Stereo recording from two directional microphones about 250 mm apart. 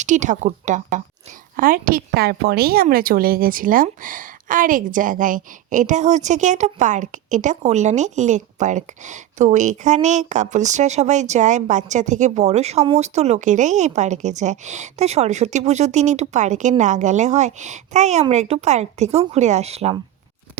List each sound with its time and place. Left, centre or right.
0.0 s a woman's voice: right